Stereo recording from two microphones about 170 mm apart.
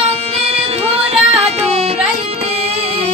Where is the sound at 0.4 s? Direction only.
35° right (ahead or behind).